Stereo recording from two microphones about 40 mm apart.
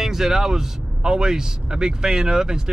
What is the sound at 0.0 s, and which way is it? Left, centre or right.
Speech, centre.